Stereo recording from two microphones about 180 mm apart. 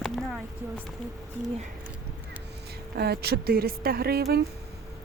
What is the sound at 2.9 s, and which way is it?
A woman's voice, 60° right (ahead or behind).